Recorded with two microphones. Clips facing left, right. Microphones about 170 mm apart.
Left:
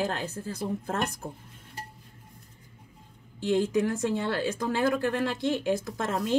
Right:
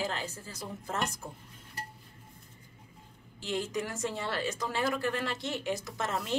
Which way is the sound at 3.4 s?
55° left (ahead or behind).